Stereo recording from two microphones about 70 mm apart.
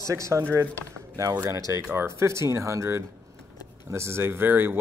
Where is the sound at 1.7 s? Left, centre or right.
Right.